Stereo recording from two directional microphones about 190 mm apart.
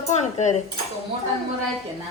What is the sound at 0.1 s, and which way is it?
Cutlery, 35° left (ahead or behind).